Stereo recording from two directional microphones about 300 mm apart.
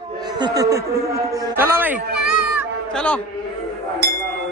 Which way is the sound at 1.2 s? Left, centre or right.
Centre.